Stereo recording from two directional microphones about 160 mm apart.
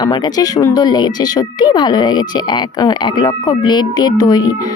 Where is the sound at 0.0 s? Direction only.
25° left (ahead or behind).